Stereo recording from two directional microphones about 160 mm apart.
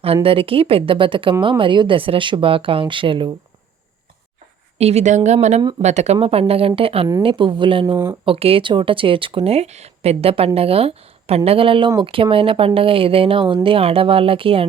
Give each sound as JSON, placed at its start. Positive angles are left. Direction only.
{"t": 0.0, "sound": "speech", "side_deg": -35}
{"t": 4.8, "sound": "speech", "side_deg": -40}